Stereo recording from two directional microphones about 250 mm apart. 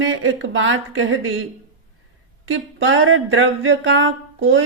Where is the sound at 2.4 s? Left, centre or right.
Right.